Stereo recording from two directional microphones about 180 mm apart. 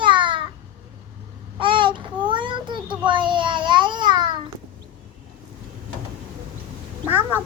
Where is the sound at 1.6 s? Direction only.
25° right (ahead or behind).